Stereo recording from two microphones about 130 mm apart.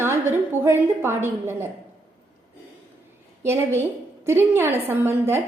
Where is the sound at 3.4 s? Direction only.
20° right (ahead or behind).